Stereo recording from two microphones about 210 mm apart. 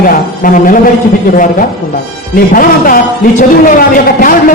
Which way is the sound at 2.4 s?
40° left (ahead or behind).